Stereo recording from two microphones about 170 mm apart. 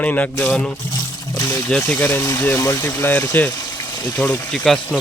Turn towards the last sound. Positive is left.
turn(degrees=5)  # may be behind; listen again after turning